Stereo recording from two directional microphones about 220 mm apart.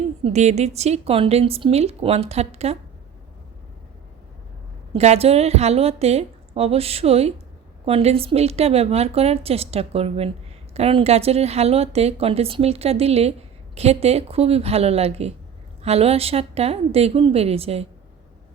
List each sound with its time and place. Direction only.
0.3 s a woman's voice: 30° right (ahead or behind)
4.9 s a woman's voice: 30° right (ahead or behind)